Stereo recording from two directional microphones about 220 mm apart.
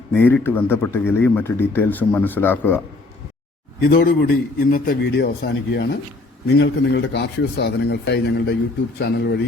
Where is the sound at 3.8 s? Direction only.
45° left (ahead or behind).